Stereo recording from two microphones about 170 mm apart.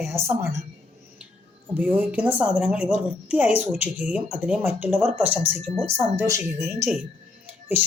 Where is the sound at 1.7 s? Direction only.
10° right (ahead or behind).